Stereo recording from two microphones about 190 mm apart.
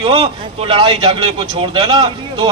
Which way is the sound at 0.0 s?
30° right (ahead or behind).